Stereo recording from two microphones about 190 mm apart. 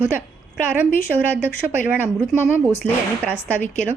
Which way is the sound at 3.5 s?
10° left (ahead or behind).